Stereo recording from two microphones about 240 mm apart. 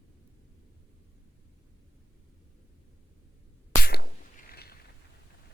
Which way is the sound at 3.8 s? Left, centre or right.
Left.